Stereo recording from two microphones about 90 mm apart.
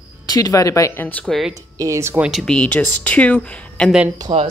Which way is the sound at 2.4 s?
10° left (ahead or behind).